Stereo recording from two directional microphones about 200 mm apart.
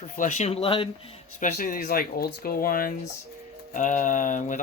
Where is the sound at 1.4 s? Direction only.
40° left (ahead or behind).